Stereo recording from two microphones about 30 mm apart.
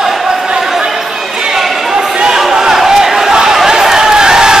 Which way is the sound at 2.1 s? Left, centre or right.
Right.